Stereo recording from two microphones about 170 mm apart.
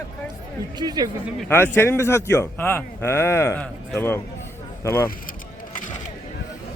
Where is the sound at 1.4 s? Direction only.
10° left (ahead or behind).